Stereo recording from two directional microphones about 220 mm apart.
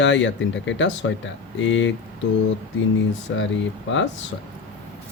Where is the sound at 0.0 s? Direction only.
55° left (ahead or behind).